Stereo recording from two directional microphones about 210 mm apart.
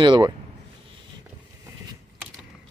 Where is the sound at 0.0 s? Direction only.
20° right (ahead or behind).